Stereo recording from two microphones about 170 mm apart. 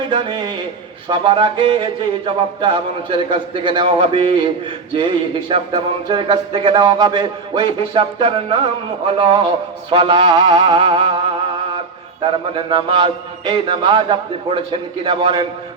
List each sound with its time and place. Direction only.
0.1 s speech: 30° right (ahead or behind)
9.9 s music: 30° right (ahead or behind)
12.7 s speech: 30° right (ahead or behind)